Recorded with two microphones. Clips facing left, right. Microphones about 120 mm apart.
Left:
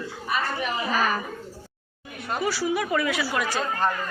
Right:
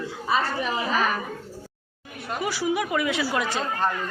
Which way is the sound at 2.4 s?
20° right (ahead or behind).